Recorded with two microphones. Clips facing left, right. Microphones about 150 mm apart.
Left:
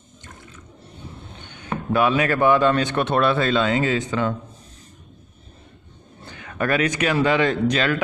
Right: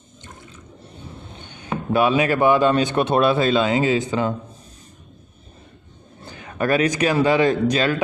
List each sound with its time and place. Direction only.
1.9 s a man's voice: 25° right (ahead or behind)
6.2 s speech: 30° right (ahead or behind)